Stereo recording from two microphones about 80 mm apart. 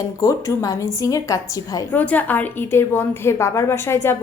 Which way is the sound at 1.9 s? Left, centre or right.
Left.